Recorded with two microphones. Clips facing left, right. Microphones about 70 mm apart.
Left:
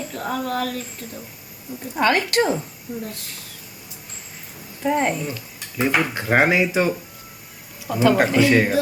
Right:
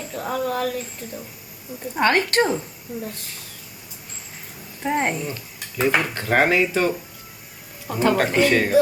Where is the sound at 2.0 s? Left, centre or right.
Right.